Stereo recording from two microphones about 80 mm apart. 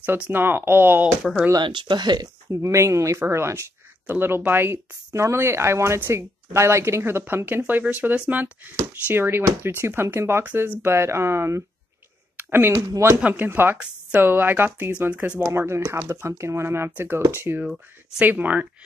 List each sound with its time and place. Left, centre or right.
0.0 s speech: right
1.2 s speech: centre
1.6 s speech: right
2.5 s speech: right
12.4 s a sound: right
13.3 s speech: right
15.4 s speech: right